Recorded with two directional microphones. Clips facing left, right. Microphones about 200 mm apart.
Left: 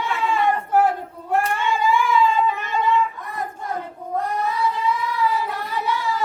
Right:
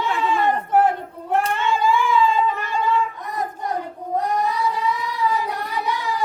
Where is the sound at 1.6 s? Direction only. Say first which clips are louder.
Right 1 dB; 15° left (ahead or behind).